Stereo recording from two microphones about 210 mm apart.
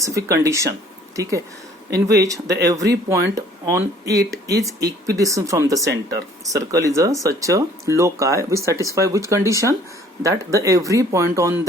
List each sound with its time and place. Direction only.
0.0 s speech: 15° right (ahead or behind)